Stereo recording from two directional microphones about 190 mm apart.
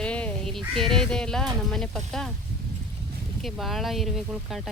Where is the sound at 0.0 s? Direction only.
5° left (ahead or behind).